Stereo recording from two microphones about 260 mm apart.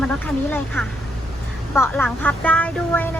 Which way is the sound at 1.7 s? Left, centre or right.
Centre.